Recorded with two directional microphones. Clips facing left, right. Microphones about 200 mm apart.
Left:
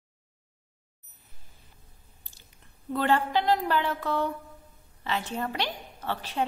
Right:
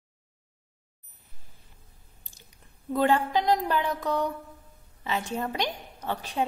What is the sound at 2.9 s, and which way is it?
A woman's voice, 15° right (ahead or behind).